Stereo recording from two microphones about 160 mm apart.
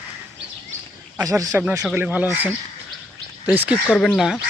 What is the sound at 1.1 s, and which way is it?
Speech, 20° right (ahead or behind).